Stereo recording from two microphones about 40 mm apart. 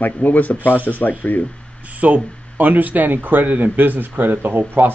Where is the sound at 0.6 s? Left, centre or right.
Right.